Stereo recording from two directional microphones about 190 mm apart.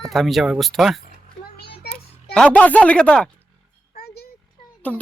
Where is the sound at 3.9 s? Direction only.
55° left (ahead or behind).